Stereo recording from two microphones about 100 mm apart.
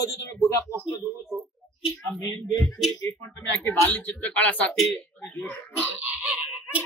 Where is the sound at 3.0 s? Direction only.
25° left (ahead or behind).